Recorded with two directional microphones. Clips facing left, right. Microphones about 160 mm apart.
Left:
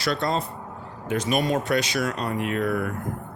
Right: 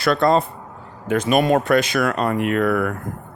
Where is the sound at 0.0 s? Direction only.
55° right (ahead or behind).